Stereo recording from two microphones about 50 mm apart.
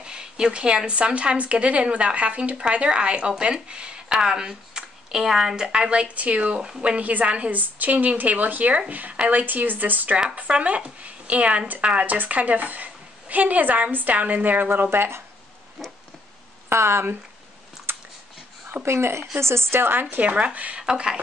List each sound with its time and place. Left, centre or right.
0.0 s a woman's voice: centre; by 10.1 s right
10.5 s a woman's voice: right
16.6 s speech: right
17.9 s a sound: right
18.9 s a woman's voice: right
20.2 s a woman's voice: right
20.8 s speech: centre